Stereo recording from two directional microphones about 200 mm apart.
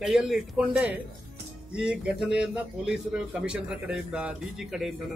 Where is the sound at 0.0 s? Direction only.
Centre (ahead or behind).